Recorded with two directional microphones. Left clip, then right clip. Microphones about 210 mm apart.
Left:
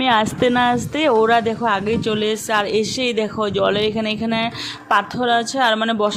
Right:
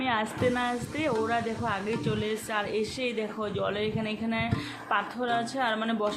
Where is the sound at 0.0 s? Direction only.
50° left (ahead or behind).